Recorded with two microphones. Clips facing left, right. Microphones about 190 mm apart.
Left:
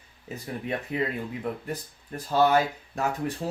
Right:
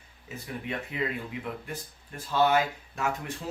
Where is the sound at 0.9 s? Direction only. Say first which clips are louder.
Left 4 dB; 40° left (ahead or behind).